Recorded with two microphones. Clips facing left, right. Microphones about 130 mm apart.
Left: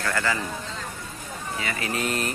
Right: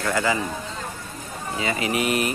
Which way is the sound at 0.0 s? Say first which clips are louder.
Right 3 dB; 15° right (ahead or behind).